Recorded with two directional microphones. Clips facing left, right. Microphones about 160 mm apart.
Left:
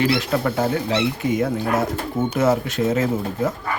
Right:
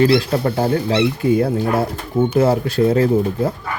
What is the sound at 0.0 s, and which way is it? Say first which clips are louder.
Speech: right 5 dB; 30° right (ahead or behind).